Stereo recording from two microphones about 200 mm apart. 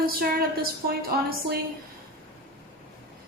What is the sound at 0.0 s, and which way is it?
Speech, 50° right (ahead or behind).